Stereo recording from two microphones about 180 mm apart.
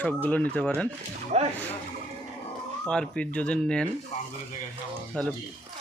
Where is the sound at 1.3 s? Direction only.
40° right (ahead or behind).